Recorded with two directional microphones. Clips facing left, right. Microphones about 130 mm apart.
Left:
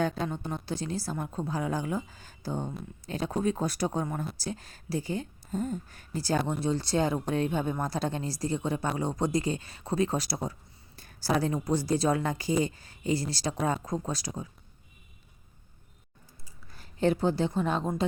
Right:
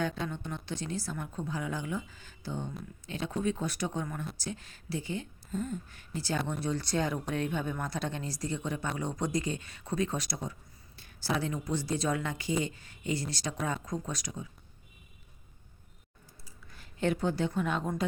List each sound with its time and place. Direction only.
0.0 s speech: 35° left (ahead or behind)
6.5 s speech: 30° left (ahead or behind)
16.7 s a woman's voice: 35° left (ahead or behind)